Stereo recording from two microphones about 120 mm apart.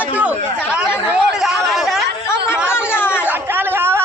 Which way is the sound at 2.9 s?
20° left (ahead or behind).